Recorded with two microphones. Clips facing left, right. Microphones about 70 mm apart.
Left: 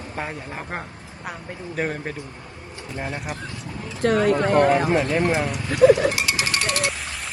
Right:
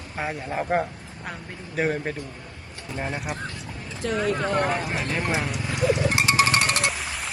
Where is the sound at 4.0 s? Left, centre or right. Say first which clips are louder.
Left 6 dB; left.